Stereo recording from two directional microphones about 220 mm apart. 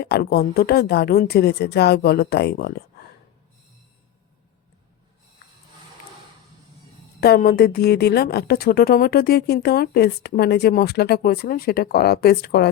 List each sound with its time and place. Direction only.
0.0 s a woman's voice: 45° left (ahead or behind)
7.2 s a woman's voice: 45° left (ahead or behind)